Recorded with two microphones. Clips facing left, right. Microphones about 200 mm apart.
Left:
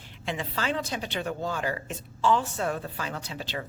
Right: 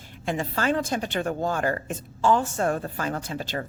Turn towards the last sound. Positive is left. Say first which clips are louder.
# right 5 dB
turn(degrees=-45)  # may be behind; listen again after turning